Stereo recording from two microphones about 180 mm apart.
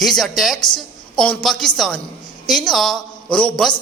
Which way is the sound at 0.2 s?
Centre (ahead or behind).